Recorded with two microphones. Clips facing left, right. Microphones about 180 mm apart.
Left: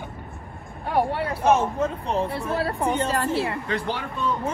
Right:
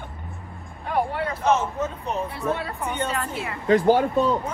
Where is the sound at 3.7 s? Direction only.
45° right (ahead or behind).